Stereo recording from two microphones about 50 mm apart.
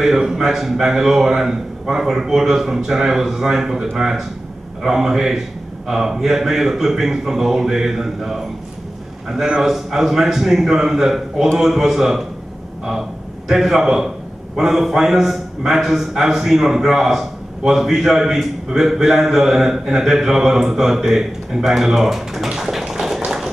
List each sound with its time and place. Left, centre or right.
0.0 s a man's voice: centre
9.6 s a man's voice: centre
13.5 s a man's voice: centre